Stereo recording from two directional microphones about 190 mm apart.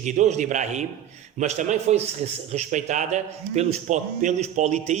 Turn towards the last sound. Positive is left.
turn(degrees=-40)  # may be behind; listen again after turning